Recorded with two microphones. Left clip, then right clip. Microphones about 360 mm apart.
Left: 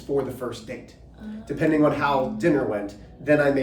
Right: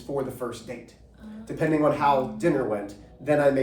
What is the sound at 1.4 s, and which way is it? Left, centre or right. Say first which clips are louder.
A man's voice: left 2 dB; centre.